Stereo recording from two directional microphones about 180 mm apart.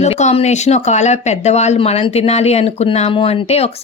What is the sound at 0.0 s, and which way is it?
Speech, 40° left (ahead or behind).